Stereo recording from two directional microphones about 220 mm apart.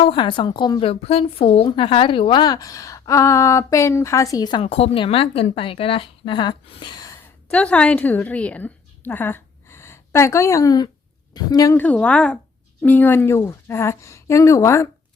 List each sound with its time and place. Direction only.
0.0 s a woman's voice: 25° left (ahead or behind)
7.5 s a woman's voice: 5° left (ahead or behind)